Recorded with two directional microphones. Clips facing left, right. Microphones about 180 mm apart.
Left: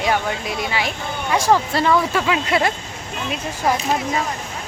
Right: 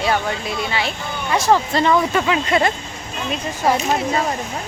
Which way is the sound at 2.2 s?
5° left (ahead or behind).